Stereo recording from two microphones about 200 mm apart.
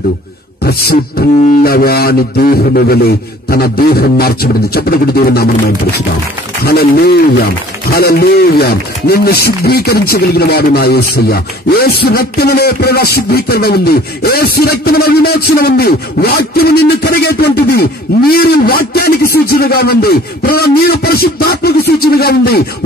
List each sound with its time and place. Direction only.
0.7 s speech: 50° left (ahead or behind)